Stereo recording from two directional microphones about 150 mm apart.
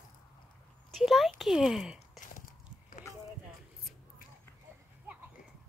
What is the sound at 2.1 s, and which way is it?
Biting, 60° left (ahead or behind).